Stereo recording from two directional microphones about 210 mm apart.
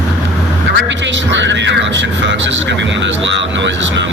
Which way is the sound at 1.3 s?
60° right (ahead or behind).